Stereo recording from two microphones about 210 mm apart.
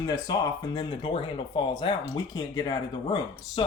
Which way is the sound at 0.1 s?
15° left (ahead or behind).